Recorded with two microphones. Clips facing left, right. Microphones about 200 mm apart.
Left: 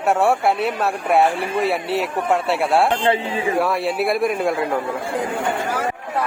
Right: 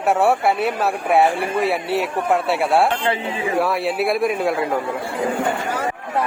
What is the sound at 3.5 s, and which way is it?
A man's voice, centre (ahead or behind).